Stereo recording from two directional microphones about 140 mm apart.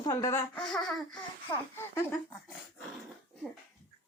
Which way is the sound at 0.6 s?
5° left (ahead or behind).